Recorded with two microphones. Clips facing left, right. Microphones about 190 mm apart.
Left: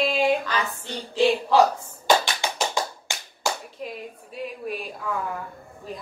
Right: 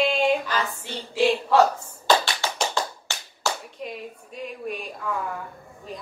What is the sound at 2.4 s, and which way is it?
Tap, 15° left (ahead or behind).